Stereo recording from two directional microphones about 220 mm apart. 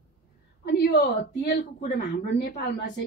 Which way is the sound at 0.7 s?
45° left (ahead or behind).